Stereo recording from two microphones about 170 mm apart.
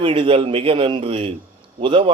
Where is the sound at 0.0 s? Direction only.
30° right (ahead or behind).